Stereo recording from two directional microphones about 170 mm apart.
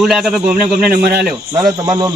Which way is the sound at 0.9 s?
70° right (ahead or behind).